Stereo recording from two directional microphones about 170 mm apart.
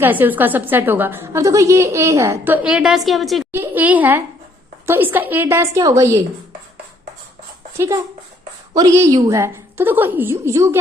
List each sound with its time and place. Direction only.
0.0 s a woman's voice: 10° right (ahead or behind)
3.5 s a woman's voice: 10° right (ahead or behind)
7.8 s a woman's voice: 20° right (ahead or behind)